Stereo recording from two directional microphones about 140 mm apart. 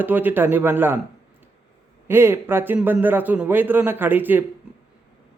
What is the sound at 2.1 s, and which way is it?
A man's voice, 15° right (ahead or behind).